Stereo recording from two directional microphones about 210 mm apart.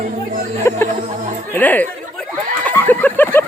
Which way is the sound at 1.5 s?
10° left (ahead or behind).